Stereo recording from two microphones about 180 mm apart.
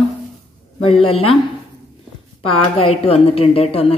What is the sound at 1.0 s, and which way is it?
Speech, 30° left (ahead or behind).